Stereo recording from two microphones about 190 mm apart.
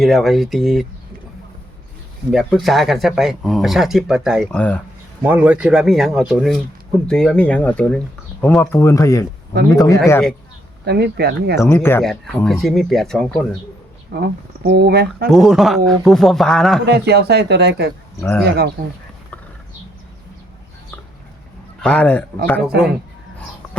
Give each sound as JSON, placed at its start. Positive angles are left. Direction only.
{"t": 0.0, "sound": "speech", "side_deg": 0}
{"t": 2.3, "sound": "speech", "side_deg": 0}
{"t": 5.2, "sound": "speech", "side_deg": -10}
{"t": 10.8, "sound": "speech", "side_deg": -60}
{"t": 11.6, "sound": "speech", "side_deg": 15}
{"t": 12.0, "sound": "speech", "side_deg": 0}
{"t": 14.1, "sound": "speech", "side_deg": -60}
{"t": 15.3, "sound": "speech", "side_deg": 0}
{"t": 16.8, "sound": "speech", "side_deg": -60}
{"t": 21.8, "sound": "speech", "side_deg": 5}